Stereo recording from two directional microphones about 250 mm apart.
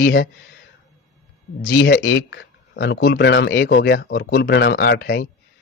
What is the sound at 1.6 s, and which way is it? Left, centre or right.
Speech, left.